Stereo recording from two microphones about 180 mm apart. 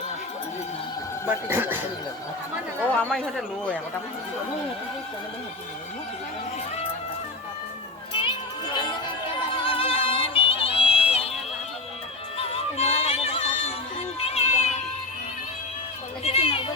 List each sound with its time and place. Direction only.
1.5 s speech: 10° right (ahead or behind)
3.0 s speech: 5° left (ahead or behind)
8.1 s music: 30° left (ahead or behind)
12.4 s music: 35° left (ahead or behind)
16.2 s a child's voice: 35° left (ahead or behind)